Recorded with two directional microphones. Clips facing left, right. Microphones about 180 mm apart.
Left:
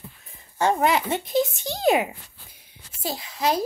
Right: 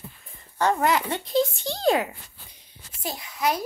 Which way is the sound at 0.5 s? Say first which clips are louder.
Left 1 dB; 25° left (ahead or behind).